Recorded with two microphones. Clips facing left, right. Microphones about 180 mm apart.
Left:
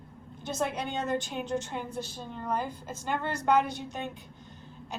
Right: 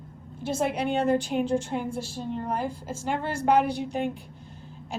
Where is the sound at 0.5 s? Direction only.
30° right (ahead or behind).